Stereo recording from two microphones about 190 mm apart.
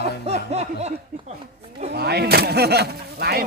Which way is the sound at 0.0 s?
35° right (ahead or behind).